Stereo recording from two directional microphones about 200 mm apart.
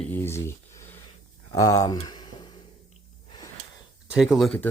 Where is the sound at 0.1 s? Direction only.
15° left (ahead or behind).